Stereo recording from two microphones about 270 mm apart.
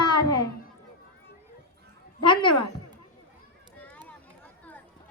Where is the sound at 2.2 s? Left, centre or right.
Centre.